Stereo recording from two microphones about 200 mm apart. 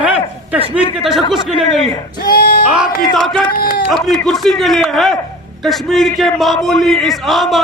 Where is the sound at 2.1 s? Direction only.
50° left (ahead or behind).